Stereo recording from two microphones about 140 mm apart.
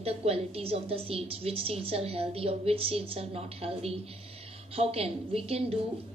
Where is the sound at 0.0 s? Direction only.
45° right (ahead or behind).